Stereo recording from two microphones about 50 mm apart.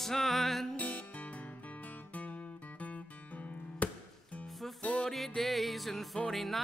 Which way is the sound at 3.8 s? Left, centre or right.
Left.